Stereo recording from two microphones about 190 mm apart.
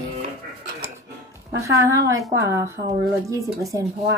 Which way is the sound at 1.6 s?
15° right (ahead or behind).